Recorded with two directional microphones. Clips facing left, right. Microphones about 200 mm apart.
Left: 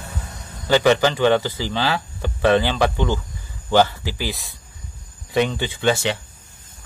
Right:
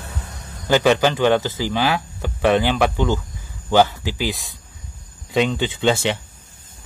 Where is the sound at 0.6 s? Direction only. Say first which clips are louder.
Even; 15° right (ahead or behind).